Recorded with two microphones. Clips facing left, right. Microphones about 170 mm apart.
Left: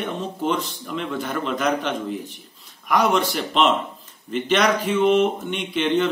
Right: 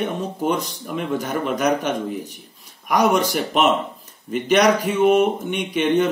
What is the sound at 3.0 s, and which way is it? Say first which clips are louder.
Speech: right 2 dB; 45° right (ahead or behind).